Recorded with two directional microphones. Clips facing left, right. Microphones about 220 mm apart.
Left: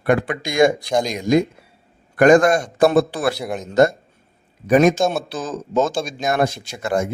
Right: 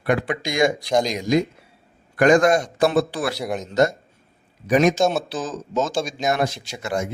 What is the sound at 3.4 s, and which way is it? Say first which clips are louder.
Speech: even; centre (ahead or behind).